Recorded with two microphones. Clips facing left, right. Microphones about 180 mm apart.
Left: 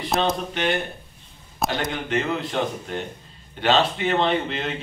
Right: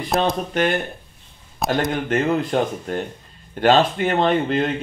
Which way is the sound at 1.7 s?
45° right (ahead or behind).